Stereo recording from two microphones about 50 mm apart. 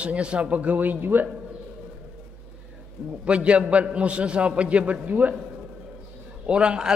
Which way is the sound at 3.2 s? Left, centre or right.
Right.